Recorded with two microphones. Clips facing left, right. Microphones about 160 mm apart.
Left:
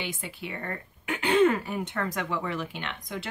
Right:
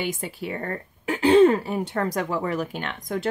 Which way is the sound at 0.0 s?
45° right (ahead or behind).